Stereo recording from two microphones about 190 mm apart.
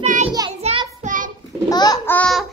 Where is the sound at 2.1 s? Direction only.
5° left (ahead or behind).